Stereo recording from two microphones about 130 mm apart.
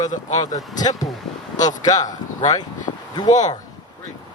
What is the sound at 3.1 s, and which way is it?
Speech, 30° left (ahead or behind).